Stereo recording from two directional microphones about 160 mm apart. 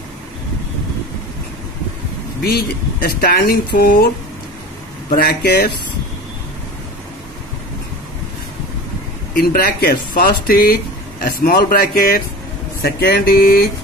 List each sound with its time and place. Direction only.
2.4 s speech: 70° left (ahead or behind)
5.1 s speech: 70° left (ahead or behind)
9.3 s speech: 60° left (ahead or behind)